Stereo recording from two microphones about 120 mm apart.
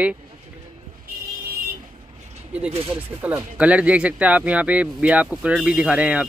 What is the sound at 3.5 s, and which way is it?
Speech, 10° right (ahead or behind).